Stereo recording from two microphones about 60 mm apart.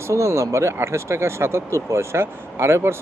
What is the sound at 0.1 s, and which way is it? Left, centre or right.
Speech, right.